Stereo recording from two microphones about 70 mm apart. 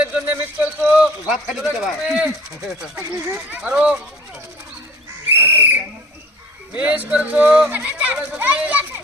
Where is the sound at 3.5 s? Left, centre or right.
Centre.